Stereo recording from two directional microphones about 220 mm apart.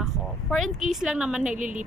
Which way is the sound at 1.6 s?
35° right (ahead or behind).